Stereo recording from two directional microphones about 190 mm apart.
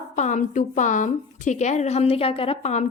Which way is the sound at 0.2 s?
40° left (ahead or behind).